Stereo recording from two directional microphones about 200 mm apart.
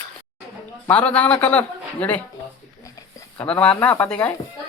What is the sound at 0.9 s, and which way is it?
A man's voice, 5° left (ahead or behind).